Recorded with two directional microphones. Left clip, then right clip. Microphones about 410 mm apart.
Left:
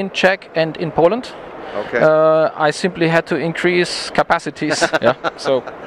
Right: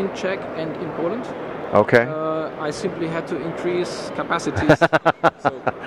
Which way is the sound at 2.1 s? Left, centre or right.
Left.